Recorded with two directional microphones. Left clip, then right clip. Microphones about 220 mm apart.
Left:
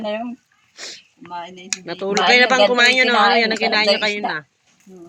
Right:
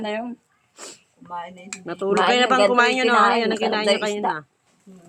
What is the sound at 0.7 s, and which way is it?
Sniff, 20° right (ahead or behind).